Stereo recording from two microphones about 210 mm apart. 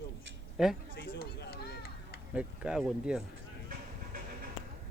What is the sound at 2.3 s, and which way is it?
Speech, 5° right (ahead or behind).